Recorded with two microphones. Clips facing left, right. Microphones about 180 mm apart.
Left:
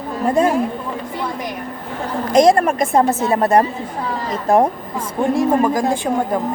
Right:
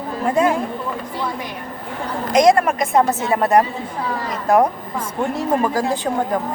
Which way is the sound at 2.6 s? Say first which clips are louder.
Left 1 dB; 45° left (ahead or behind).